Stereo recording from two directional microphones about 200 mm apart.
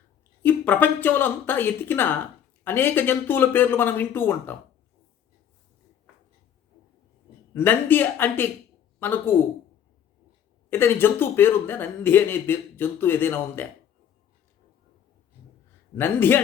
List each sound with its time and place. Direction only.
0.4 s a man's voice: 10° left (ahead or behind)
7.5 s a man's voice: 10° left (ahead or behind)
10.7 s a man's voice: 10° left (ahead or behind)
16.0 s a man's voice: 10° left (ahead or behind)